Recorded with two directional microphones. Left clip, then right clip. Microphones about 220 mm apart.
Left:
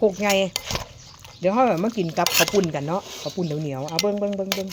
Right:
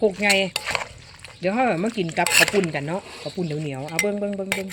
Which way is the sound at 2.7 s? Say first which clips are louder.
Left 1 dB; 5° left (ahead or behind).